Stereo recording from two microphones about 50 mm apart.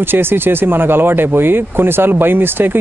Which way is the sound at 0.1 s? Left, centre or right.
Right.